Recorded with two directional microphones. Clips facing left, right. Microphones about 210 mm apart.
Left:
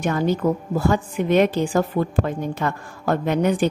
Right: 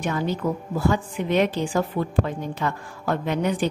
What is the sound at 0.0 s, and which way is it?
A woman's voice, 45° left (ahead or behind).